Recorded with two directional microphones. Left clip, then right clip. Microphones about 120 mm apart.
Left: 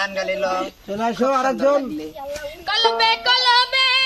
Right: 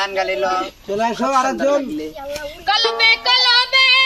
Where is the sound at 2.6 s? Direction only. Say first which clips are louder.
Right 2 dB; 15° left (ahead or behind).